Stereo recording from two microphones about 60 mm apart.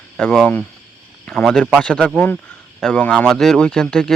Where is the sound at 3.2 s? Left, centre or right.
Centre.